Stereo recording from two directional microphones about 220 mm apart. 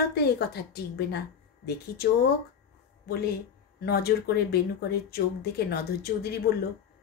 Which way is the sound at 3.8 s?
45° left (ahead or behind).